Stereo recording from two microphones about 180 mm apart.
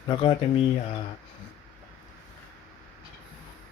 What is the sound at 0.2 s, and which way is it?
Speech, 30° left (ahead or behind).